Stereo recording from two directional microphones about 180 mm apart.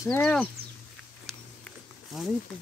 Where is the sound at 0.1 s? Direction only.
5° left (ahead or behind).